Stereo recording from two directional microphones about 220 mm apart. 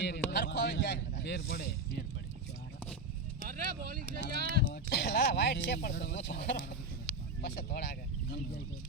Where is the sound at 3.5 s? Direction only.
40° right (ahead or behind).